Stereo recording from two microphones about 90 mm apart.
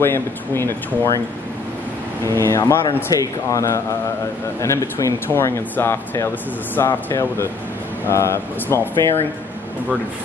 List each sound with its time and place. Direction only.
0.0 s speech: 25° left (ahead or behind)
2.2 s speech: 30° left (ahead or behind)